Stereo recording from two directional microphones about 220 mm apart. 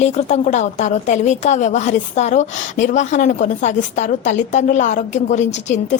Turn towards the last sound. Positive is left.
turn(degrees=30)  # may be behind; listen again after turning